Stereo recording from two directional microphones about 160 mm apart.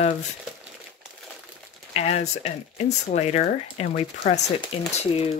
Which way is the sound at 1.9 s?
40° left (ahead or behind).